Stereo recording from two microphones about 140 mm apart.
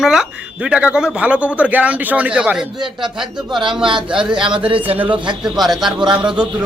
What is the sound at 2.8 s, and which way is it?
Speech, 35° right (ahead or behind).